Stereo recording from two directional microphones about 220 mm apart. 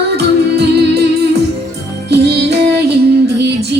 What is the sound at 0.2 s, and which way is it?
Music, 50° right (ahead or behind).